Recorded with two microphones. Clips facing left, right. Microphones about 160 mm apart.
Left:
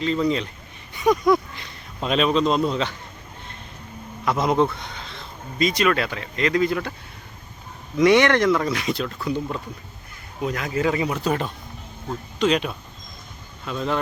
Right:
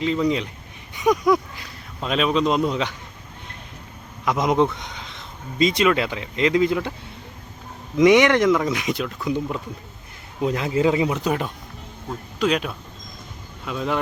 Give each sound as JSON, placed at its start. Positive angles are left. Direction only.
{"t": 0.0, "sound": "speech", "side_deg": -15}
{"t": 4.3, "sound": "speech", "side_deg": -15}
{"t": 7.9, "sound": "speech", "side_deg": -15}